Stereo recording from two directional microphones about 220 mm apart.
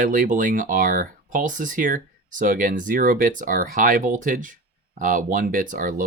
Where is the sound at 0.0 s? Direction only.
35° right (ahead or behind).